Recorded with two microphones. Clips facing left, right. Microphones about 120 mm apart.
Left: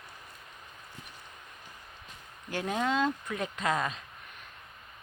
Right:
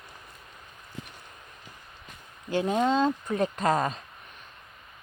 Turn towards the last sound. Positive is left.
turn(degrees=-40)  # may be behind; listen again after turning